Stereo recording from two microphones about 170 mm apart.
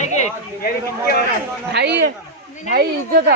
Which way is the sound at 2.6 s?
65° right (ahead or behind).